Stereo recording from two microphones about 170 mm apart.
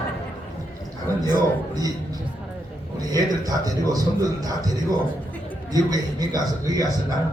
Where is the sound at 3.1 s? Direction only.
20° right (ahead or behind).